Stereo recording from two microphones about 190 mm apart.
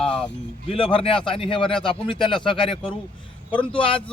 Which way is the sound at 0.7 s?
30° left (ahead or behind).